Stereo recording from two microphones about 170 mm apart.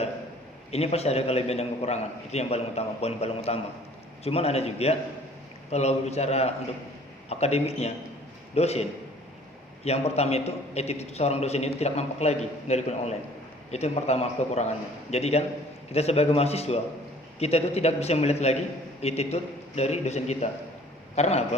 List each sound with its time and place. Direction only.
0.7 s a man's voice: 35° left (ahead or behind)